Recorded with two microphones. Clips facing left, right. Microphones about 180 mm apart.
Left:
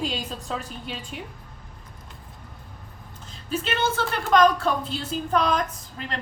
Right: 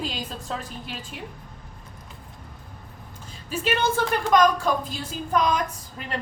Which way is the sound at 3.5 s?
10° right (ahead or behind).